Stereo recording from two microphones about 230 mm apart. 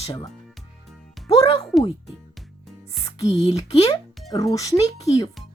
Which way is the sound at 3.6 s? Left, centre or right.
Centre.